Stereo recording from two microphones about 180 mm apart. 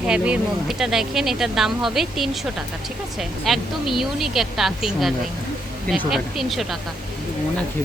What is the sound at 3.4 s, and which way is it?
Speech, centre (ahead or behind).